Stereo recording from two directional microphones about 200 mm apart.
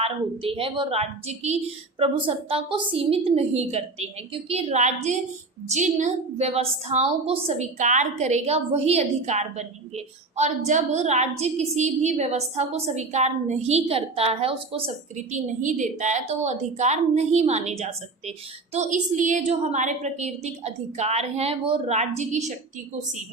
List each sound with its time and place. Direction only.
0.0 s a woman's voice: 30° right (ahead or behind)